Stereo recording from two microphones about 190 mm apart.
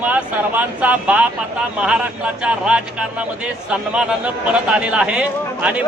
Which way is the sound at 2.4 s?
5° right (ahead or behind).